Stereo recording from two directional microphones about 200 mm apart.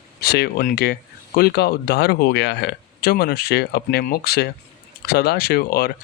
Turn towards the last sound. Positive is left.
turn(degrees=50)  # may be behind; listen again after turning